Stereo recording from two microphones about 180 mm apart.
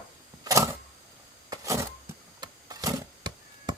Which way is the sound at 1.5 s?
15° right (ahead or behind).